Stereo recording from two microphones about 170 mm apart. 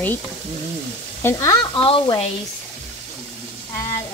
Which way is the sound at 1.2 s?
15° left (ahead or behind).